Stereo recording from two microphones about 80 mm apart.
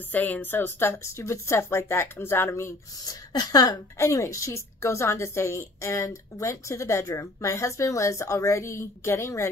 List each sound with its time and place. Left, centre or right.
0.1 s a woman's voice: left
3.3 s a woman's voice: left